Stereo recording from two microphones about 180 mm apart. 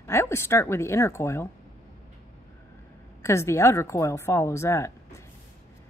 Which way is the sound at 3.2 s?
15° left (ahead or behind).